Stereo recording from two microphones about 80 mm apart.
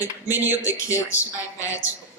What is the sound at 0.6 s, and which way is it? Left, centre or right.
A woman's voice, left.